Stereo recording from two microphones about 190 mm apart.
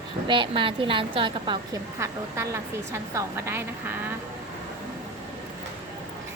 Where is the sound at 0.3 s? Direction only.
25° right (ahead or behind).